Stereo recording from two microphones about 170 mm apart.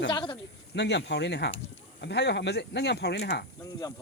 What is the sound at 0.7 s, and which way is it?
Speech, 90° left.